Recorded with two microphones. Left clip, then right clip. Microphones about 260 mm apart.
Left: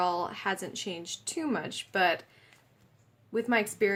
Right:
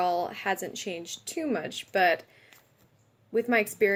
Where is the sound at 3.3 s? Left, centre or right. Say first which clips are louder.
Right 3 dB; left.